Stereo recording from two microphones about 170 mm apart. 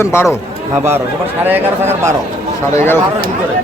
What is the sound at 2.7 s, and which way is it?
Speech, 15° left (ahead or behind).